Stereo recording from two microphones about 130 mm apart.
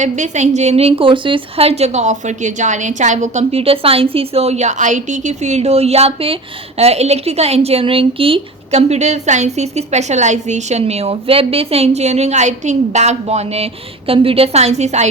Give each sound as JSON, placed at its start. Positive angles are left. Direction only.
{"t": 0.0, "sound": "a woman's voice", "side_deg": -65}